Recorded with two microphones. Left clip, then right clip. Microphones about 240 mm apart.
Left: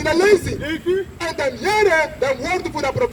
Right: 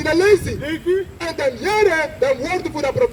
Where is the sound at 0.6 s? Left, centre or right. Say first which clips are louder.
Right 1 dB; centre.